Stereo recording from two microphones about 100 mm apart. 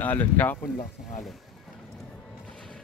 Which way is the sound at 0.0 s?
15° left (ahead or behind).